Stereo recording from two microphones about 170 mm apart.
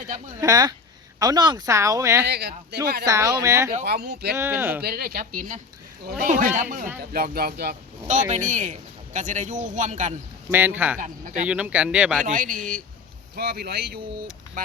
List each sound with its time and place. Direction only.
0.3 s speech: 20° right (ahead or behind)
2.2 s speech: 70° right (ahead or behind)
3.1 s speech: 15° right (ahead or behind)
3.8 s speech: 70° right (ahead or behind)
4.4 s speech: 15° right (ahead or behind)
4.8 s a man's voice: 60° right (ahead or behind)
8.0 s a man's voice: 45° right (ahead or behind)
10.5 s speech: 10° right (ahead or behind)
12.2 s a man's voice: 55° right (ahead or behind)
13.3 s speech: 70° right (ahead or behind)